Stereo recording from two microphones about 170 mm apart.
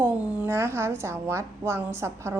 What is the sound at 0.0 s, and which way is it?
A woman's voice, 10° right (ahead or behind).